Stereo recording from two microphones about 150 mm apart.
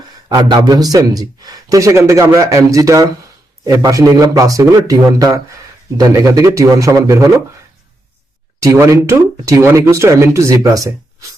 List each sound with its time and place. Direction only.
0.3 s speech: 25° right (ahead or behind)
8.6 s speech: 20° right (ahead or behind)